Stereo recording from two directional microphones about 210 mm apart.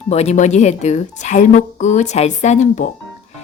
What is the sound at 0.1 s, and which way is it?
A woman's voice, 30° left (ahead or behind).